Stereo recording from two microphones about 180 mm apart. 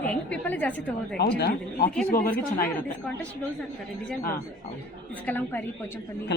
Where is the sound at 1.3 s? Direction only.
60° left (ahead or behind).